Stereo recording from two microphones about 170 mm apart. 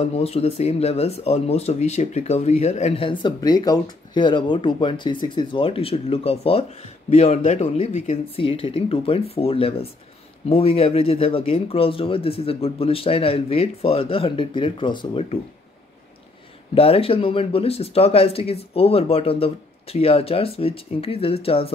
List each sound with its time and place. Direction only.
0.0 s speech: 35° left (ahead or behind)
16.7 s speech: 35° left (ahead or behind)